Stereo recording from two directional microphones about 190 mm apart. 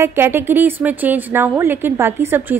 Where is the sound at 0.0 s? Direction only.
10° right (ahead or behind).